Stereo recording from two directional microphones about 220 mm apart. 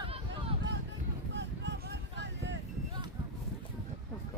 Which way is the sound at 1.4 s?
55° right (ahead or behind).